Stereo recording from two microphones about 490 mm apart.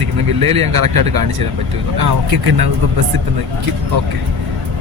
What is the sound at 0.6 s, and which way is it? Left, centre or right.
Speech, right.